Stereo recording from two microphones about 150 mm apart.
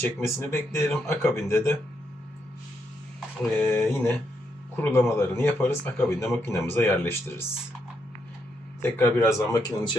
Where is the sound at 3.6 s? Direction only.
15° left (ahead or behind).